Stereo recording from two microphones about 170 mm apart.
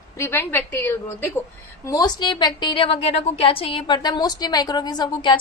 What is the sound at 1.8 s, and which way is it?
A woman's voice, 25° left (ahead or behind).